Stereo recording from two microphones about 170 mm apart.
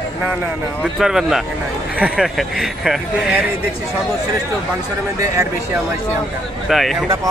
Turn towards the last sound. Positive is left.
turn(degrees=0)  # may be behind; listen again after turning